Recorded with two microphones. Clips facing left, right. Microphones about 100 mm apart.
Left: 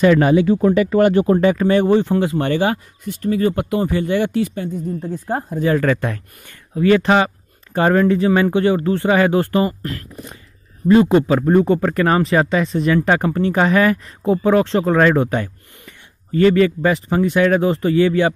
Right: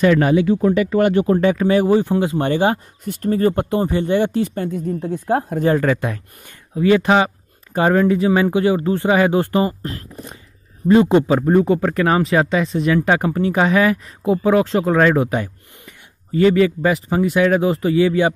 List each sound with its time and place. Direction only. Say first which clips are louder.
0.0 s speech: left 1 dB; 25° left (ahead or behind)
0.6 s speech: left 2 dB; 50° left (ahead or behind)
1.4 s speech: left 1 dB; centre (ahead or behind)
1.7 s speech: even; 10° right (ahead or behind)
3.0 s speech: even; 45° right (ahead or behind); by 4.5 s 25° right (ahead or behind)
4.7 s a woman's voice: right 2 dB; 85° right
5.8 s speech: even; 15° right (ahead or behind)
9.8 s speech: left 1 dB; 30° right (ahead or behind)
11.4 s speech: left 1 dB; 5° right (ahead or behind)